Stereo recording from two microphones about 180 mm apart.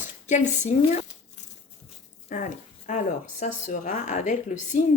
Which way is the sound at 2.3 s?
45° left (ahead or behind).